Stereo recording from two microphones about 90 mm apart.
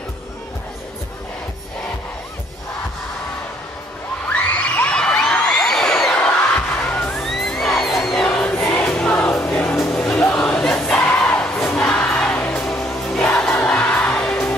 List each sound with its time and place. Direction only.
4.3 s a sound: 15° left (ahead or behind)
6.8 s music: 15° left (ahead or behind)
7.2 s crowd: 5° left (ahead or behind)
8.9 s music: 15° left (ahead or behind)
10.3 s crowd: 10° left (ahead or behind)
11.6 s music: 10° left (ahead or behind)